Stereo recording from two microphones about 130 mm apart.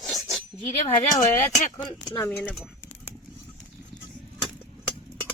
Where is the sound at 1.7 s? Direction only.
35° left (ahead or behind).